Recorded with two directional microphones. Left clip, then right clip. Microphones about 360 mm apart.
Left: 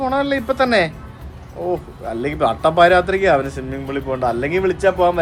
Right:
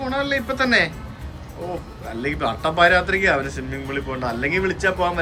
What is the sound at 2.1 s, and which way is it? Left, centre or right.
Speech, centre.